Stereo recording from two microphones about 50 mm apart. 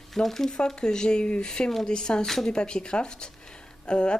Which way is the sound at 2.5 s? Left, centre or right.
Centre.